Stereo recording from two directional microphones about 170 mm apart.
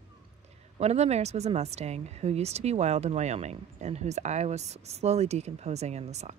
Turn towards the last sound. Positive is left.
turn(degrees=-40)  # may be behind; listen again after turning